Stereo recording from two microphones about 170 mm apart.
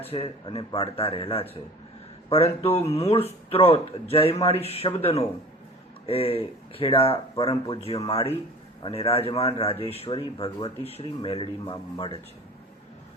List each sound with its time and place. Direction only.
0.1 s speech: 30° left (ahead or behind)